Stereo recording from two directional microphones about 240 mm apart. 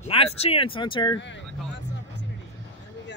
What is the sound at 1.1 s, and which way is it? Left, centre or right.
Speech, left.